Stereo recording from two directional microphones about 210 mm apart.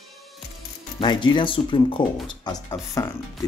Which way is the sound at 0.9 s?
20° left (ahead or behind).